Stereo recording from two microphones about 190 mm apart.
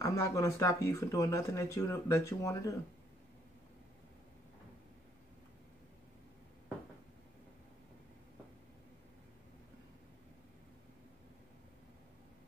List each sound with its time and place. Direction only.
0.0 s speech: 15° left (ahead or behind)